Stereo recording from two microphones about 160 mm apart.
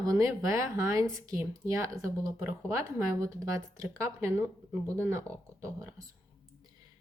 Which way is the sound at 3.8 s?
20° right (ahead or behind).